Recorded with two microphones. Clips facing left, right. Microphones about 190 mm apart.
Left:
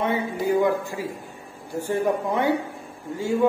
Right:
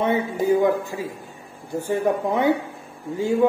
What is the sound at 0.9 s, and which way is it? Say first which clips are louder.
Speech: right 1 dB; 20° right (ahead or behind).